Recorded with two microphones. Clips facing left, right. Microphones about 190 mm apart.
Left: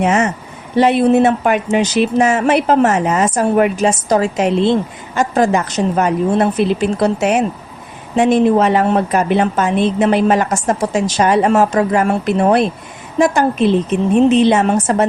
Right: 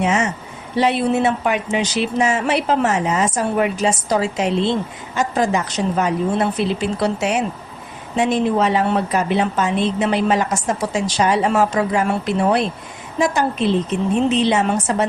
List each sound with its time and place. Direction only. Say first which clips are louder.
0.0 s a woman's voice: left 4 dB; 50° left (ahead or behind)